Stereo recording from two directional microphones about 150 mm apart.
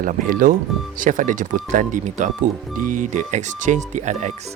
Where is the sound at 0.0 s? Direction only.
65° right (ahead or behind).